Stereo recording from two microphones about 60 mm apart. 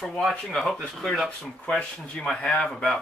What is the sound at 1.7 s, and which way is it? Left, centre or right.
Speech, centre.